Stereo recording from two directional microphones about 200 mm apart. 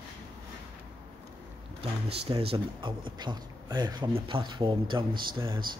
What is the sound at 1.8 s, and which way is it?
Speech, 30° right (ahead or behind).